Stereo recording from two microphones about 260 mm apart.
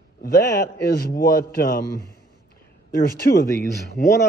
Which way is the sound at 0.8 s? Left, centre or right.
Left.